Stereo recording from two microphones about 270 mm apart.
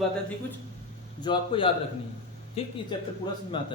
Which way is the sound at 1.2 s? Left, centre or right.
Centre.